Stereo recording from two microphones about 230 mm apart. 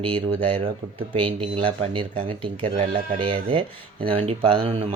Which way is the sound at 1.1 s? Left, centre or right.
Right.